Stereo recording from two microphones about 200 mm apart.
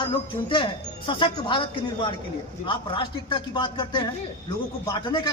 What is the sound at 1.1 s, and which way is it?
Speech, 25° left (ahead or behind).